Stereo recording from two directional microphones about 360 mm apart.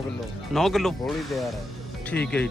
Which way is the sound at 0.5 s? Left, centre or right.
Centre.